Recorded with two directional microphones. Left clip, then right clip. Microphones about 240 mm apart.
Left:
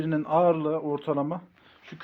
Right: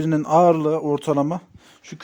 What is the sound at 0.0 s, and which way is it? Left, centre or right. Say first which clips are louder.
Speech: right 7 dB; right.